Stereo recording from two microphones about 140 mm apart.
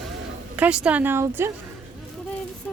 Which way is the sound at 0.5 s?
10° right (ahead or behind).